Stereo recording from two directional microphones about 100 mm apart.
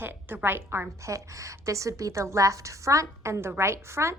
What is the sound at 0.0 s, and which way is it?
A woman's voice, 20° right (ahead or behind).